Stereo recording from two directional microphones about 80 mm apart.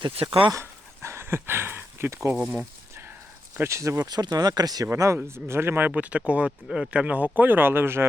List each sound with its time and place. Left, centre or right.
0.6 s a sound: right
2.3 s speech: centre
3.5 s speech: right
4.1 s speech: right
4.9 s speech: right